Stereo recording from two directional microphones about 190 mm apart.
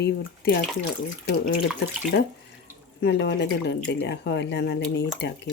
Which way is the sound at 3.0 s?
65° left (ahead or behind).